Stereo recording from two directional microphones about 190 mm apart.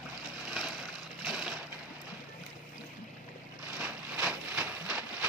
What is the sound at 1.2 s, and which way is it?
Crushing, centre (ahead or behind).